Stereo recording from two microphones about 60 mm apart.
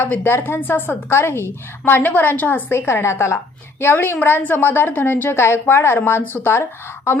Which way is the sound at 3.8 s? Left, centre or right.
Left.